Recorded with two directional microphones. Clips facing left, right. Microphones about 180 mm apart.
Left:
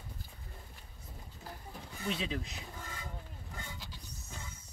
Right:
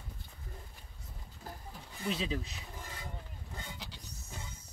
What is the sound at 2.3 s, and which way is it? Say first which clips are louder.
Speech: right 1 dB; 25° right (ahead or behind).